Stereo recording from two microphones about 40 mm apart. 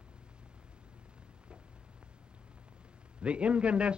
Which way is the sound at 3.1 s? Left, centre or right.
Right.